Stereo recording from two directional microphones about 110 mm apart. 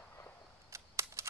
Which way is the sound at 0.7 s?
25° right (ahead or behind).